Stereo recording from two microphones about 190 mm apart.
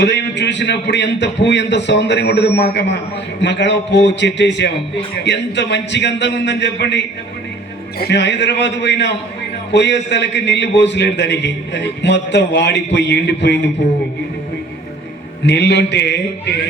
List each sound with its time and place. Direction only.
0.0 s a man's voice: 65° left (ahead or behind)
15.4 s a man's voice: 65° left (ahead or behind)